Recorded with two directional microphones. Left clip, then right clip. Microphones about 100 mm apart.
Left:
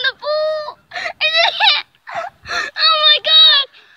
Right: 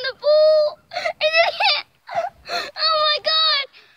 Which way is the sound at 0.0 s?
35° right (ahead or behind).